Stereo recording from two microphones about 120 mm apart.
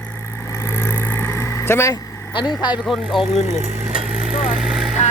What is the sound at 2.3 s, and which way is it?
Speech, 40° left (ahead or behind).